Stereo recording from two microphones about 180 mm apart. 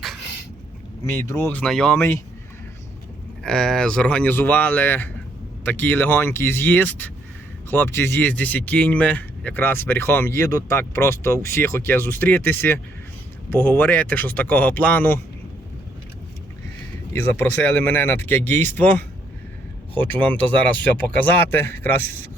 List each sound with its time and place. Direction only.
1.3 s speech: 15° left (ahead or behind)
3.4 s speech: 5° left (ahead or behind)
17.1 s speech: 10° left (ahead or behind)